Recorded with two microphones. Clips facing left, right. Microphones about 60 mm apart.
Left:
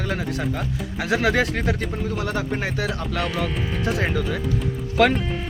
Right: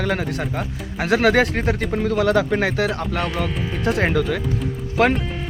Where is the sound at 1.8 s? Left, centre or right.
Right.